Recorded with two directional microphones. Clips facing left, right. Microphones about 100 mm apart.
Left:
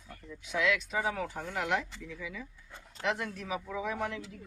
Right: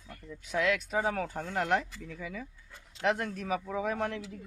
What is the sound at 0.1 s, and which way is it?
Speech, 45° right (ahead or behind).